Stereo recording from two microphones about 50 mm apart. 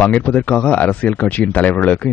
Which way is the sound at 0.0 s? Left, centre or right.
Left.